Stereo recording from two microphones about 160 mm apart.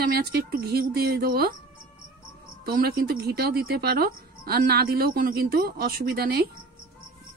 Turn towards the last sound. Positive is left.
turn(degrees=-75)  # may be behind; listen again after turning